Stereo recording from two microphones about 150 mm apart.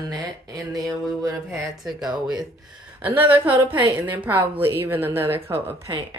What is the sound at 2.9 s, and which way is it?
Speech, 10° right (ahead or behind).